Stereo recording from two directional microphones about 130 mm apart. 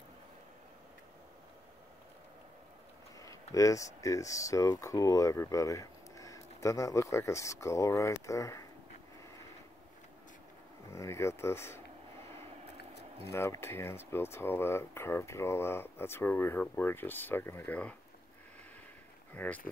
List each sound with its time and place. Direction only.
3.2 s speech: 25° left (ahead or behind)
10.9 s speech: 20° left (ahead or behind)
13.3 s speech: 20° left (ahead or behind)
19.3 s speech: 15° left (ahead or behind)